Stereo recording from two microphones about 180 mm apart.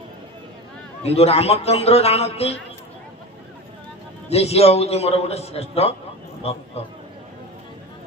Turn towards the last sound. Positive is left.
turn(degrees=35)  # may be behind; listen again after turning